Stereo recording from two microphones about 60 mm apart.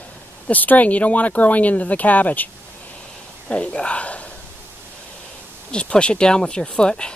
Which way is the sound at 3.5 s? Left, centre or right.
Centre.